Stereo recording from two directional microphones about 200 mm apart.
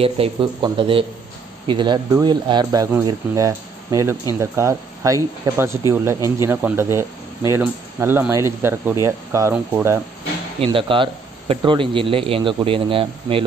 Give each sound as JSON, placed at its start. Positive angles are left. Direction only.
{"t": 0.0, "sound": "speech", "side_deg": -25}
{"t": 10.6, "sound": "speech", "side_deg": -25}